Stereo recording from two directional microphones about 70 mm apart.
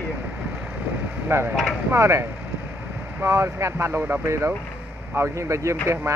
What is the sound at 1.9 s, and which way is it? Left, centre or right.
Speech, right.